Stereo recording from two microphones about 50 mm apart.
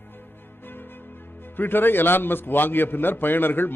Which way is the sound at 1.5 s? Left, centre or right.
Left.